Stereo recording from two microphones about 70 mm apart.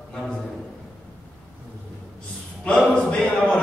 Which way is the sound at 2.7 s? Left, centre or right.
Centre.